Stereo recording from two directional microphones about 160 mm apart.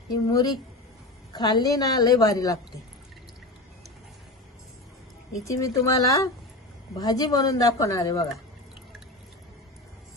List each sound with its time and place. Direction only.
0.1 s a woman's voice: 25° left (ahead or behind)
5.4 s a woman's voice: 20° left (ahead or behind)